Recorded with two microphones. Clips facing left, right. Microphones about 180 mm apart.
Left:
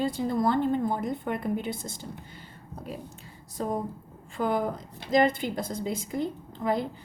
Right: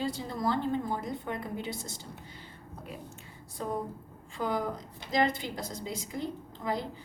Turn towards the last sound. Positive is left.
turn(degrees=55)  # may be behind; listen again after turning